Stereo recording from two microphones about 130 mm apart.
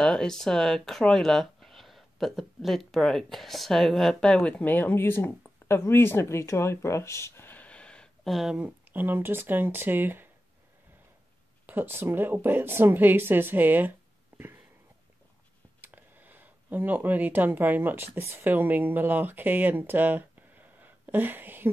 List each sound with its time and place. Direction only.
0.0 s speech: 5° left (ahead or behind); by 10.3 s 15° right (ahead or behind)
11.6 s speech: 15° right (ahead or behind)
15.8 s speech: 15° right (ahead or behind)